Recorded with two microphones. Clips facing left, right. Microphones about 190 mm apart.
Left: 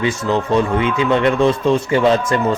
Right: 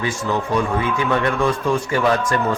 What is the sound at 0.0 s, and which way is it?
Speech, 20° left (ahead or behind).